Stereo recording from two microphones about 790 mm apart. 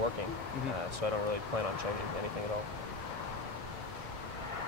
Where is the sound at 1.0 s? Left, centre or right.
Right.